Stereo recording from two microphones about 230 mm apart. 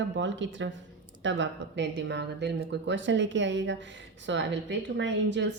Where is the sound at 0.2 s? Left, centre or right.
Right.